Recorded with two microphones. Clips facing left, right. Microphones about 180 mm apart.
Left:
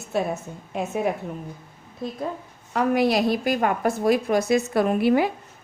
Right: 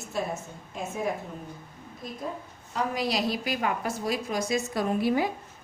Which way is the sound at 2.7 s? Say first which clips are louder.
Left 8 dB; 60° left (ahead or behind).